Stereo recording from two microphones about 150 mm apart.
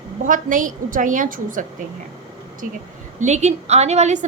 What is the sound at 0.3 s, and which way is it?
A woman's voice, 60° right (ahead or behind).